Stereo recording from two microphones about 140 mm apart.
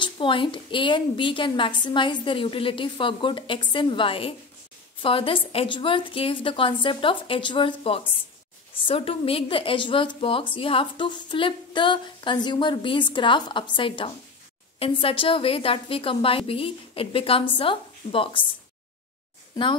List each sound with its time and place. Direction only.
0.0 s a woman's voice: 35° left (ahead or behind)